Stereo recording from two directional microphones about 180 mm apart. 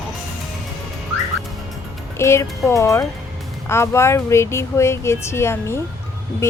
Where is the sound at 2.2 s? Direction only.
15° left (ahead or behind).